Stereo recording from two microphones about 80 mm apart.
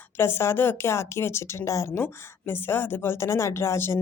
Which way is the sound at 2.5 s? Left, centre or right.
Left.